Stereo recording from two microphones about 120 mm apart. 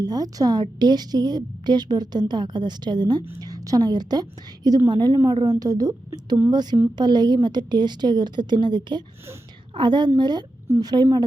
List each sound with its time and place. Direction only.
0.0 s a woman's voice: 30° right (ahead or behind)